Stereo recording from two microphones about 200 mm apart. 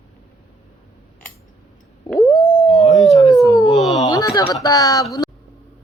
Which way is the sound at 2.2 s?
15° left (ahead or behind).